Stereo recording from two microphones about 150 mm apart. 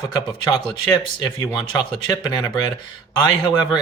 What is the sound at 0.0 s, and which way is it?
Speech, 30° left (ahead or behind).